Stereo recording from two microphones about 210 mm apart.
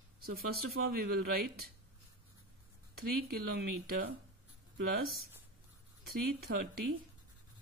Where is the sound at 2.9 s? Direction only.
45° right (ahead or behind).